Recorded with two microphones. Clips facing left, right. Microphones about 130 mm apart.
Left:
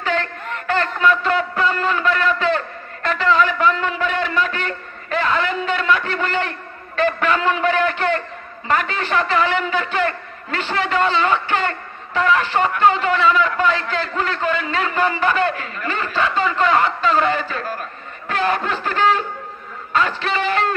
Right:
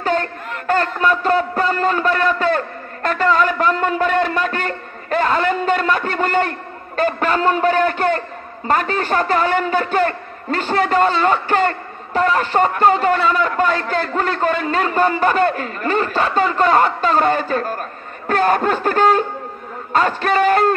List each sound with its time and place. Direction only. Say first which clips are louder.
0.0 s a sound: right 3 dB; 45° right (ahead or behind)
8.6 s a man's voice: right 3 dB; 40° right (ahead or behind)
18.3 s snicker: right 5 dB; 45° right (ahead or behind)